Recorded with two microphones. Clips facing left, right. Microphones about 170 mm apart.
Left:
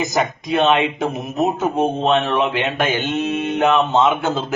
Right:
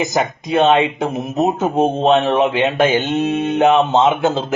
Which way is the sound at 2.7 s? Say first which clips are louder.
Right 5 dB; 30° right (ahead or behind).